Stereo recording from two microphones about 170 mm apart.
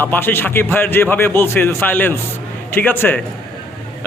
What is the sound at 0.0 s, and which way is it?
A man's voice, 10° left (ahead or behind).